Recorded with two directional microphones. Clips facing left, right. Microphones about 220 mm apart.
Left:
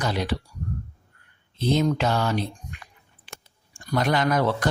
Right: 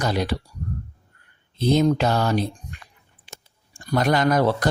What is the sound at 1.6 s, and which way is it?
Speech, 40° right (ahead or behind).